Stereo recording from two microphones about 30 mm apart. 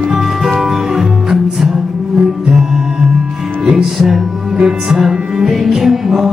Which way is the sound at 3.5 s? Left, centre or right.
Right.